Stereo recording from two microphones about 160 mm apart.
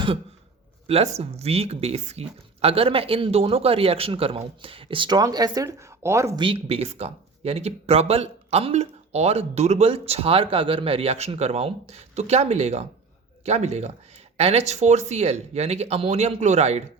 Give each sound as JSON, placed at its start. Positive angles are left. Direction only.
{"t": 0.9, "sound": "speech", "side_deg": -40}
{"t": 6.4, "sound": "speech", "side_deg": -35}